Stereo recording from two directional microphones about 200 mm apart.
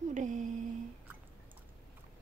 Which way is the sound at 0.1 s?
40° right (ahead or behind).